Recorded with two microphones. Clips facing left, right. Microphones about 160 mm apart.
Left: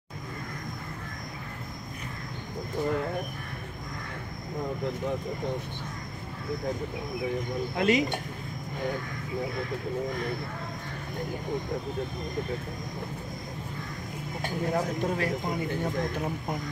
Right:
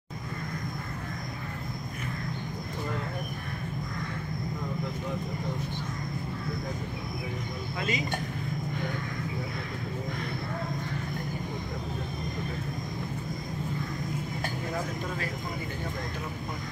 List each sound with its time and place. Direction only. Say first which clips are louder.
7.7 s speech: left 8 dB; 70° left (ahead or behind)